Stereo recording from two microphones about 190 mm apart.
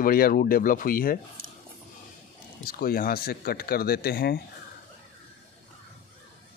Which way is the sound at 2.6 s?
50° left (ahead or behind).